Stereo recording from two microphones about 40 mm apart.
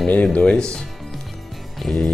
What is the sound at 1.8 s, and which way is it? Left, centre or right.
Music, centre.